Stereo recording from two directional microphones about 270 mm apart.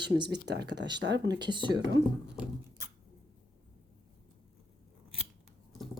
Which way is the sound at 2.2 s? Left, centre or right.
Centre.